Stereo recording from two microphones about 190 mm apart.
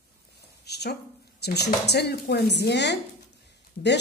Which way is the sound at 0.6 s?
60° left (ahead or behind).